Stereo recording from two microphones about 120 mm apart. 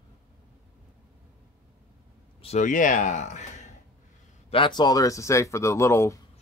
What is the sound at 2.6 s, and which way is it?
Speech, 90° left.